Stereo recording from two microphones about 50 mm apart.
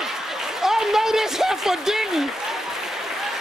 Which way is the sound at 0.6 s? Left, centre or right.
Centre.